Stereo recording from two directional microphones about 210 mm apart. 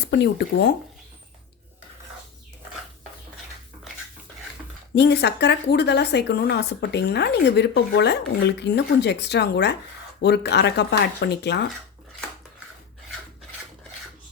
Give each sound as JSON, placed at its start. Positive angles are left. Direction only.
{"t": 0.0, "sound": "speech", "side_deg": 50}
{"t": 4.9, "sound": "speech", "side_deg": 55}